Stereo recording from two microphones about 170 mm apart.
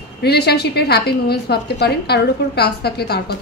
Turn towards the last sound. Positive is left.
turn(degrees=70)  # may be behind; listen again after turning